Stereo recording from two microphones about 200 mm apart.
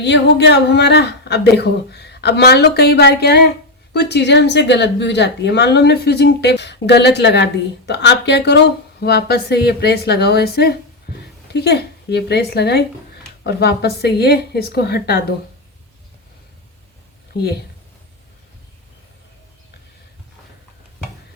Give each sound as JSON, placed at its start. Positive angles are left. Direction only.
{"t": 0.0, "sound": "a woman's voice", "side_deg": 60}